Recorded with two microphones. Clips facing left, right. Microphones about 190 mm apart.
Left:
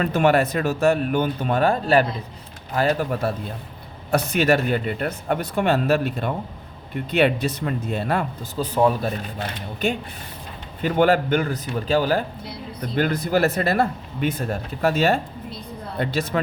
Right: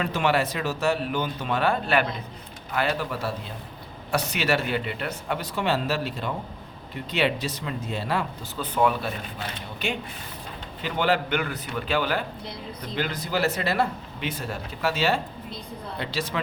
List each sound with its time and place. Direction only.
0.0 s speech: 50° left (ahead or behind)
8.5 s speech: 35° left (ahead or behind)
13.0 s speech: 55° left (ahead or behind)